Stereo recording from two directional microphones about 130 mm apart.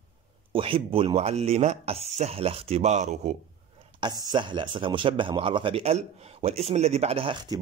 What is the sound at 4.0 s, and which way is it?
Speech, 35° right (ahead or behind).